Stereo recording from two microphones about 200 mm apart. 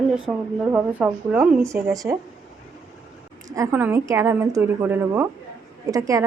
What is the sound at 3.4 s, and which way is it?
Speech, 15° right (ahead or behind).